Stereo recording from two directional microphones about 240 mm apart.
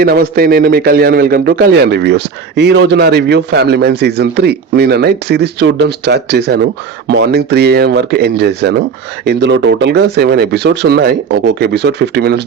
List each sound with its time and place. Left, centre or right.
0.0 s a man's voice: right